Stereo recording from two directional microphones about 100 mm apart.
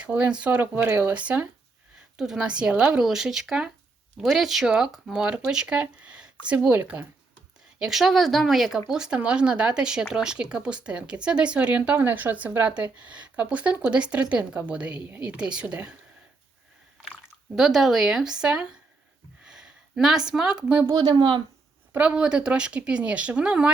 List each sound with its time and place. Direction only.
0.0 s speech: 15° right (ahead or behind)
7.8 s speech: 5° right (ahead or behind)
17.0 s speech: 5° right (ahead or behind)
20.8 s speech: 40° right (ahead or behind)
21.9 s speech: 10° right (ahead or behind)